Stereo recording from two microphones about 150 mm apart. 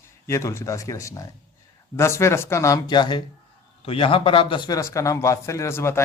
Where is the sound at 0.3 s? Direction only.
20° left (ahead or behind).